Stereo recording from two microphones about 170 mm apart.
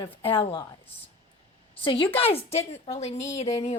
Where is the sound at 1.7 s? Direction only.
30° left (ahead or behind).